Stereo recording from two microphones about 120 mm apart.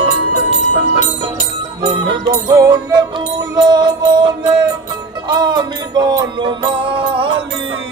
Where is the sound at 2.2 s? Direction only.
25° right (ahead or behind); by 7.3 s 45° right (ahead or behind).